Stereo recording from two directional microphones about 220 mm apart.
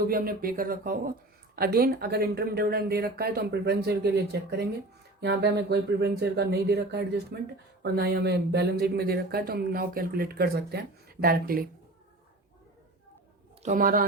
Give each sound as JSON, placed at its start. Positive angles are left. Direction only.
{"t": 0.1, "sound": "speech", "side_deg": -40}
{"t": 13.6, "sound": "a woman's voice", "side_deg": -35}